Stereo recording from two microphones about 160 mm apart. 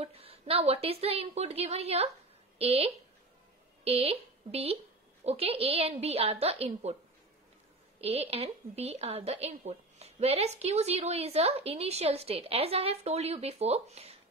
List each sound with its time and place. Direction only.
0.0 s a woman's voice: 40° right (ahead or behind)
8.0 s a woman's voice: 40° right (ahead or behind)